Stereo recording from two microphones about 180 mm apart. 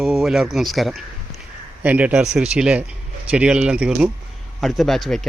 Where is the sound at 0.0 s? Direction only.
Centre (ahead or behind).